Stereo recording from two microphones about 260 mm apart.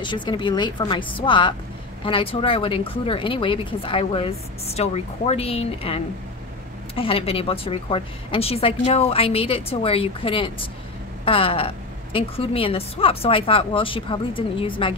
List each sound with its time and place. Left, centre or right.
0.0 s a woman's voice: centre
7.0 s speech: left